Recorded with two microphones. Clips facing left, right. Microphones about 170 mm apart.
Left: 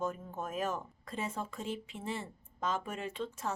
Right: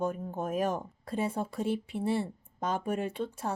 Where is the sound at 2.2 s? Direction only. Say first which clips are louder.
Right 4 dB; 35° right (ahead or behind).